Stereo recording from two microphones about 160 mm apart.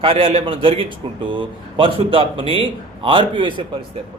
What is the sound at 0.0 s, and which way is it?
Speech, 35° right (ahead or behind).